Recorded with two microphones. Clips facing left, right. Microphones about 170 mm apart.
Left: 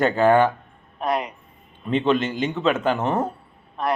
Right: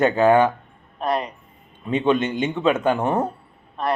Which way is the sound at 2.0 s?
20° right (ahead or behind).